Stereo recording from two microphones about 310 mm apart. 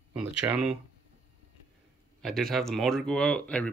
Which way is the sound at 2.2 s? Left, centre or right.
Centre.